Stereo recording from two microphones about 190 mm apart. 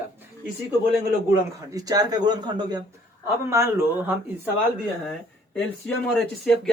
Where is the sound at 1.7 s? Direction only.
20° right (ahead or behind).